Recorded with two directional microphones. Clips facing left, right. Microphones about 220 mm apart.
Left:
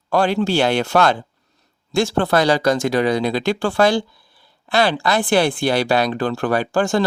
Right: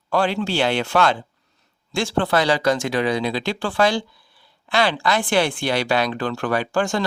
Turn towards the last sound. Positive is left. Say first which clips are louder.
# left 3 dB
turn(degrees=40)  # may be behind; listen again after turning